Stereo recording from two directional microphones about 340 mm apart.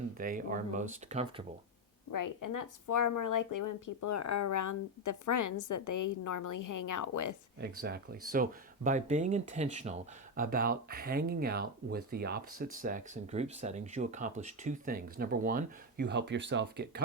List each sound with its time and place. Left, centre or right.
0.2 s speech: right
2.1 s speech: left
7.6 s speech: right